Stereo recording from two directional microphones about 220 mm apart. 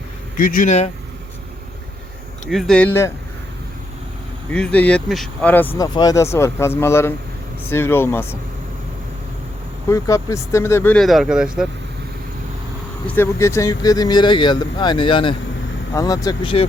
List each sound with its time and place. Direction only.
0.3 s speech: 40° left (ahead or behind)
2.5 s speech: centre (ahead or behind)
4.5 s speech: 5° left (ahead or behind)
9.9 s speech: 15° left (ahead or behind); by 11.7 s 5° right (ahead or behind)
13.1 s speech: 10° left (ahead or behind)